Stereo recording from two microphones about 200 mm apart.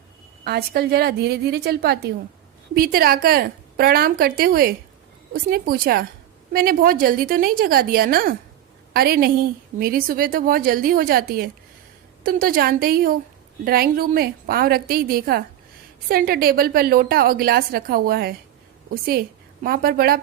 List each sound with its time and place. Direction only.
0.4 s a woman's voice: 50° right (ahead or behind)
19.6 s a woman's voice: 50° right (ahead or behind)